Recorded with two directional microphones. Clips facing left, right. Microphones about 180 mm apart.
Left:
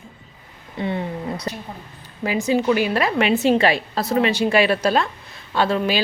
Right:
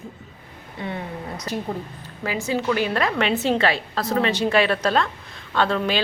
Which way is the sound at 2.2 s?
15° left (ahead or behind).